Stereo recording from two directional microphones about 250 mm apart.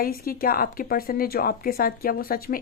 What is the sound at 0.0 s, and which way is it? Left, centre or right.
A woman's voice, left.